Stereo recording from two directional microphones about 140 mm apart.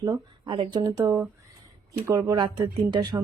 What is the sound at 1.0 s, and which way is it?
Speech, 15° right (ahead or behind).